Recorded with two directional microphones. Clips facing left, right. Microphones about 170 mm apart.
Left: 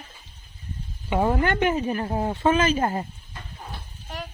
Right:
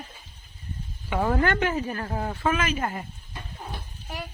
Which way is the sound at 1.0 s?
20° left (ahead or behind).